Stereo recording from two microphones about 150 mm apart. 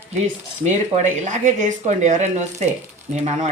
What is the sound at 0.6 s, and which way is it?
Speech, 55° right (ahead or behind).